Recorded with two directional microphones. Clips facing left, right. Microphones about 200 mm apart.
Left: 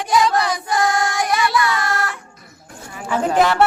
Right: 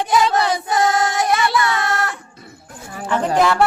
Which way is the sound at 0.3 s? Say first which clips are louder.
Right 1 dB; 25° right (ahead or behind).